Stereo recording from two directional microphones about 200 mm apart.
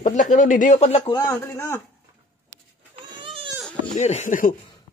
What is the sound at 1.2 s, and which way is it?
Speech, 15° left (ahead or behind).